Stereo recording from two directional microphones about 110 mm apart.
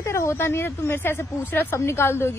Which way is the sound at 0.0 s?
25° left (ahead or behind).